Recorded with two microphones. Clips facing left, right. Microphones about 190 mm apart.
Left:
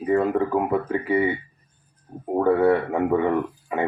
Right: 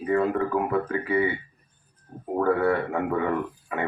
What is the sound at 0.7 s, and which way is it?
Speech, 20° left (ahead or behind).